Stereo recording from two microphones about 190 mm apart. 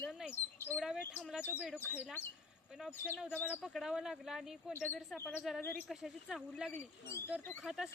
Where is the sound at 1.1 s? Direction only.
5° right (ahead or behind).